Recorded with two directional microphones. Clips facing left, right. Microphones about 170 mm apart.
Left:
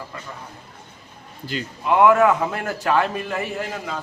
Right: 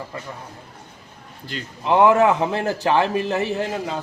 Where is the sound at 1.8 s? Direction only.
25° right (ahead or behind).